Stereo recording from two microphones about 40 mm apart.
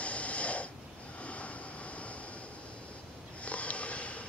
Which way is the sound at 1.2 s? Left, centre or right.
Left.